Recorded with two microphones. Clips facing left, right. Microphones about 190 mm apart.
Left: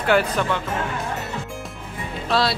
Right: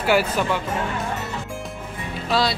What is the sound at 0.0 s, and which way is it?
Speech, 5° right (ahead or behind).